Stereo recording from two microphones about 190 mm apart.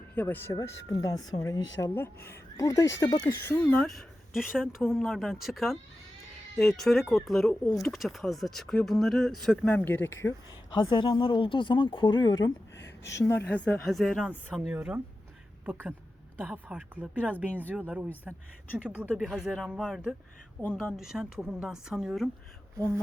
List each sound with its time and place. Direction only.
0.2 s speech: 10° left (ahead or behind)
10.8 s speech: 25° left (ahead or behind)
12.7 s a sound: 65° left (ahead or behind)
13.1 s speech: 15° left (ahead or behind)
14.7 s speech: 10° right (ahead or behind)
19.0 s speech: 5° left (ahead or behind)
20.6 s speech: 10° left (ahead or behind)
20.9 s speech: 5° right (ahead or behind)